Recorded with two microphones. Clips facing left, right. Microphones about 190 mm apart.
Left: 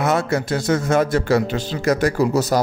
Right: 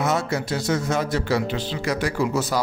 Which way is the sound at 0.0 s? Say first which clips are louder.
Left 4 dB; 55° left (ahead or behind).